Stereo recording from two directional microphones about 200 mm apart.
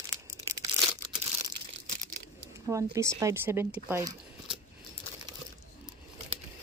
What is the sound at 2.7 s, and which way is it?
Speech, 15° right (ahead or behind).